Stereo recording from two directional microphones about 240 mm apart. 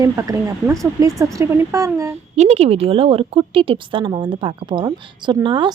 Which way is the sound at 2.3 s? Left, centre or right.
Right.